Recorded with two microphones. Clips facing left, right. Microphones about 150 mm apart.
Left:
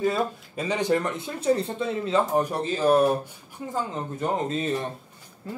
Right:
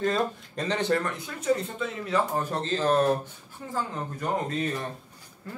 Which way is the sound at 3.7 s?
20° left (ahead or behind).